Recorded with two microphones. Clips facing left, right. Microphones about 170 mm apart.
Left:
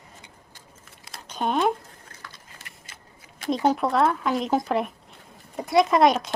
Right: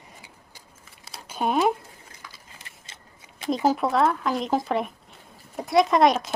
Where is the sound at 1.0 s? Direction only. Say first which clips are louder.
Right 1 dB; 5° right (ahead or behind).